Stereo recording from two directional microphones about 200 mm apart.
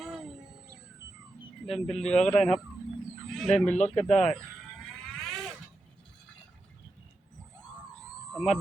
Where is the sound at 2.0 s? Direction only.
5° left (ahead or behind).